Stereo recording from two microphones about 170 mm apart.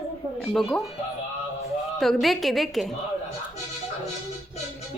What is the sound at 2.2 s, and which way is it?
Speech, centre (ahead or behind).